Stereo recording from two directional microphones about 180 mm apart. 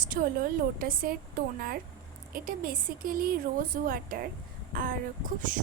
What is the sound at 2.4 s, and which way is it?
Speech, 50° right (ahead or behind).